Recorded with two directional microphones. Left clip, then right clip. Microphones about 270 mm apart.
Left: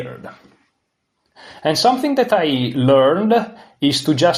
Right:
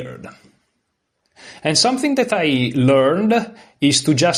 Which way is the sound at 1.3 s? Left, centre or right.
Right.